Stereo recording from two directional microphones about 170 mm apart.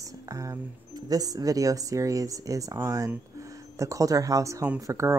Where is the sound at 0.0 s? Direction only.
20° right (ahead or behind).